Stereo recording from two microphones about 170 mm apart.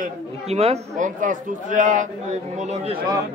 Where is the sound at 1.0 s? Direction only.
50° right (ahead or behind).